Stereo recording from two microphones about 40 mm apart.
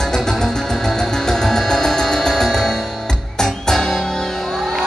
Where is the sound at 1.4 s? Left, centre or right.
Centre.